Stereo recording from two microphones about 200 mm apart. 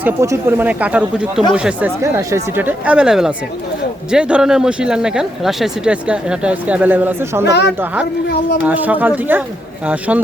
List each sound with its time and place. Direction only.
0.0 s speech: 10° right (ahead or behind)
7.4 s speech: 60° left (ahead or behind)
8.6 s speech: 10° right (ahead or behind)